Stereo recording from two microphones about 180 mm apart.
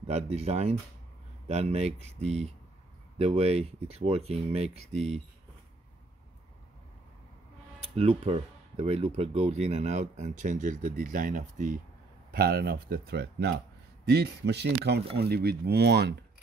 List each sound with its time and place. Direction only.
0.0 s speech: 35° right (ahead or behind)
7.9 s speech: 35° right (ahead or behind)
12.3 s speech: 60° right (ahead or behind)